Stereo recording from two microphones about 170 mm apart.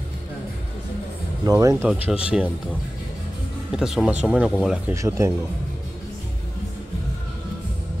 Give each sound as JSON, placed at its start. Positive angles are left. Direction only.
{"t": 1.4, "sound": "speech", "side_deg": -20}
{"t": 1.8, "sound": "speech", "side_deg": -5}
{"t": 3.7, "sound": "speech", "side_deg": -5}